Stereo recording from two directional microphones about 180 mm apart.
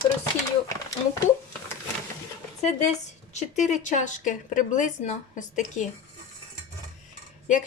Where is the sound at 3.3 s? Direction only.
40° left (ahead or behind).